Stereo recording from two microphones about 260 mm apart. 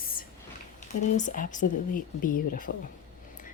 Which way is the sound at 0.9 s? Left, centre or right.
Left.